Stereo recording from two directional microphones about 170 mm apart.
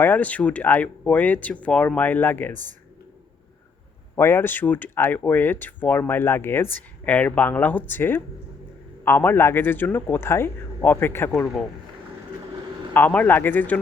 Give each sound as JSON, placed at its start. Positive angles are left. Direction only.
{"t": 0.0, "sound": "speech", "side_deg": 10}
{"t": 4.1, "sound": "speech", "side_deg": 15}
{"t": 12.9, "sound": "speech", "side_deg": 10}